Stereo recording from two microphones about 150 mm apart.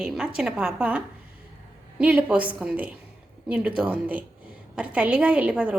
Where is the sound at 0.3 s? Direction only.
5° right (ahead or behind).